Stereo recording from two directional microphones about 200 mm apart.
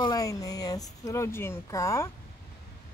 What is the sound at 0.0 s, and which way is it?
Speech, 20° left (ahead or behind).